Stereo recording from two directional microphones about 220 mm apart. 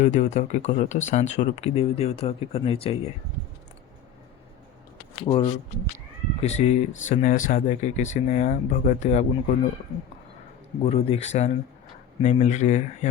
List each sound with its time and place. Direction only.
0.0 s speech: 35° left (ahead or behind)
5.2 s speech: 25° left (ahead or behind)
10.8 s speech: 30° left (ahead or behind)